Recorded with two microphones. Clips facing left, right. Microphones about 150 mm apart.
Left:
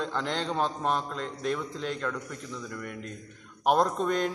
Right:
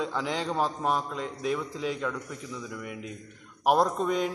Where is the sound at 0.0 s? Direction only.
5° right (ahead or behind).